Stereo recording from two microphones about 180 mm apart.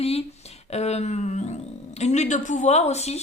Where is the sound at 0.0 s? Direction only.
35° left (ahead or behind).